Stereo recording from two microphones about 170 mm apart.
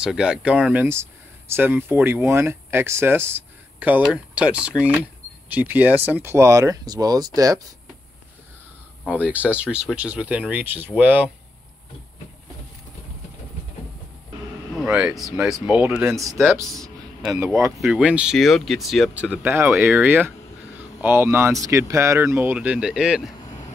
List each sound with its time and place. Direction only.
0.0 s speech: 5° right (ahead or behind); by 7.6 s 20° right (ahead or behind)
9.1 s speech: 10° right (ahead or behind)
14.8 s speech: 5° right (ahead or behind)
17.7 s speech: 5° right (ahead or behind)
23.4 s vehicle: 25° left (ahead or behind)